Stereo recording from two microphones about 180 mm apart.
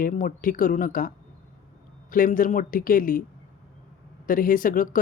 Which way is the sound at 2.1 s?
50° left (ahead or behind).